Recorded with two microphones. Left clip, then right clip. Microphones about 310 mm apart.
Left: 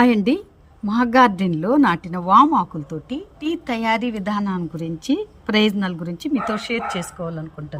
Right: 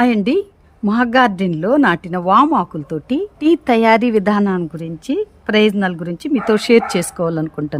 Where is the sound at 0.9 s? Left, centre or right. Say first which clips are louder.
Right 2 dB; centre.